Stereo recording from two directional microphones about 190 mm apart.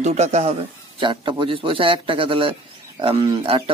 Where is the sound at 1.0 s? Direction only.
25° right (ahead or behind).